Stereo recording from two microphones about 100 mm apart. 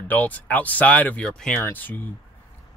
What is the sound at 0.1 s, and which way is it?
Speech, 15° left (ahead or behind).